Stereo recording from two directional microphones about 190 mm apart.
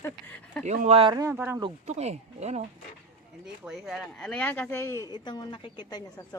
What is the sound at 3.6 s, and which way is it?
Speech, centre (ahead or behind).